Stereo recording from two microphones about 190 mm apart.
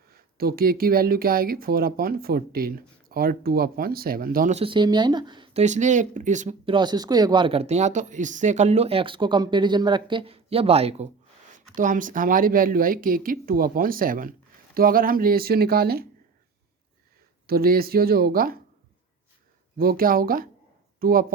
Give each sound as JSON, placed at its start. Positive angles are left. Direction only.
{"t": 0.1, "sound": "speech", "side_deg": -50}
{"t": 4.6, "sound": "speech", "side_deg": -25}
{"t": 5.6, "sound": "speech", "side_deg": -40}
{"t": 6.7, "sound": "speech", "side_deg": -25}
{"t": 11.7, "sound": "speech", "side_deg": -45}
{"t": 17.4, "sound": "speech", "side_deg": -50}
{"t": 19.8, "sound": "speech", "side_deg": -50}